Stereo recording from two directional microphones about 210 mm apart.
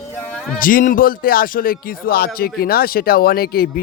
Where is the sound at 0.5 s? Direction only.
40° left (ahead or behind).